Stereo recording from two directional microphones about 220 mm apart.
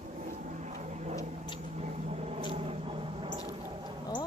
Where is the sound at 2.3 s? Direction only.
25° right (ahead or behind).